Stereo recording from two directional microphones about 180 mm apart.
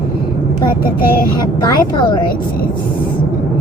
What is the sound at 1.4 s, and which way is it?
Speech, 25° left (ahead or behind).